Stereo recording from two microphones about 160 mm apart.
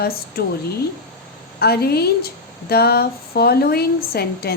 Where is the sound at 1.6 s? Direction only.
75° left (ahead or behind).